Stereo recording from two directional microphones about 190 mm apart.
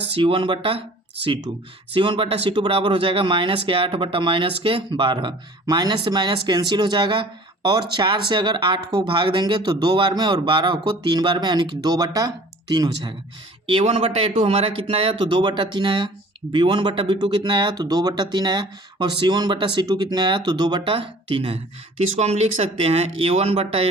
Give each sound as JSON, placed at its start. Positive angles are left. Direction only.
{"t": 0.1, "sound": "speech", "side_deg": -30}
{"t": 13.7, "sound": "speech", "side_deg": -30}